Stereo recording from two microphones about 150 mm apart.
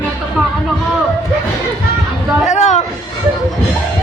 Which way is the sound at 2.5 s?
50° left (ahead or behind).